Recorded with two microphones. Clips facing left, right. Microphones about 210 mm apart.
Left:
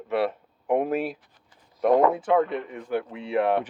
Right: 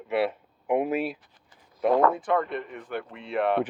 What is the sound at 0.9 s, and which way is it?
Speech, 50° left (ahead or behind).